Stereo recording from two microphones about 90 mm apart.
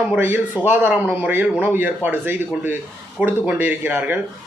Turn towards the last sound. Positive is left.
turn(degrees=-20)  # may be behind; listen again after turning